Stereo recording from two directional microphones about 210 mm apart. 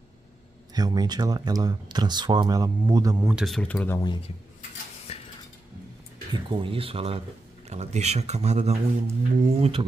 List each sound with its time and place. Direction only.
0.7 s speech: 20° right (ahead or behind)
3.3 s speech: centre (ahead or behind)
5.1 s a sound: 30° left (ahead or behind)
6.5 s speech: 25° right (ahead or behind)